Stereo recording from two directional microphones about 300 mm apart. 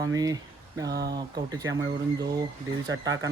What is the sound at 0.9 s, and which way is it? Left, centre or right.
Speech, right.